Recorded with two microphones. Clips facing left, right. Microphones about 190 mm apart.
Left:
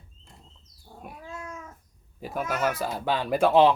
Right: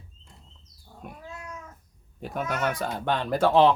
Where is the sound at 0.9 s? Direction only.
30° left (ahead or behind).